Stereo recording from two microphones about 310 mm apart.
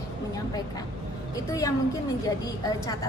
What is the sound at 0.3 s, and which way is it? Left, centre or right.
A woman's voice, centre.